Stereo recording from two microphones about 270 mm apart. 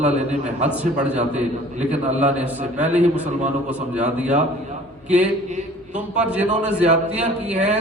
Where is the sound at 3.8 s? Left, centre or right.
Right.